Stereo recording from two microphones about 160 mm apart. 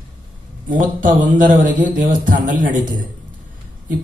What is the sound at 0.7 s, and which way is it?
A man's voice, 55° right (ahead or behind).